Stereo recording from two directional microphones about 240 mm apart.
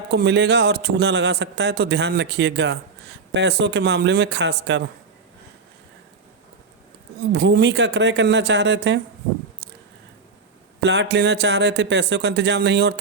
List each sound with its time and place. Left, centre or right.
0.1 s a man's voice: right
7.3 s a man's voice: right
10.8 s a man's voice: right